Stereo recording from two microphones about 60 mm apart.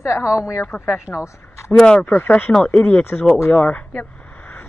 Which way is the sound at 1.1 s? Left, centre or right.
Left.